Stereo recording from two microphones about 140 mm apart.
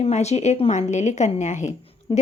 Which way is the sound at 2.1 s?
40° left (ahead or behind).